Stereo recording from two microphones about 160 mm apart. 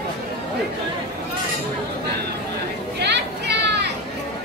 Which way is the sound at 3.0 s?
90° right.